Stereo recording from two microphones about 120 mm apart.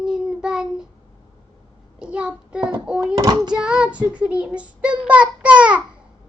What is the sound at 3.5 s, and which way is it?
Child singing, 10° right (ahead or behind).